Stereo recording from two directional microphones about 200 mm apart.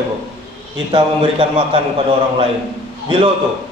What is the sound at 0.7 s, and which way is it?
A man's voice, 25° right (ahead or behind).